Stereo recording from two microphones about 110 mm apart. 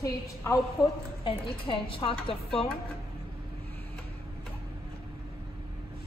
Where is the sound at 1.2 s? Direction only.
55° left (ahead or behind).